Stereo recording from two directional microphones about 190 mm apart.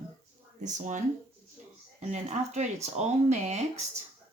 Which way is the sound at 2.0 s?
35° right (ahead or behind).